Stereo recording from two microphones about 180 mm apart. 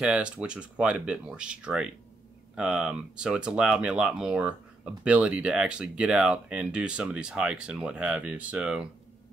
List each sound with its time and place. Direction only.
0.0 s speech: 5° right (ahead or behind)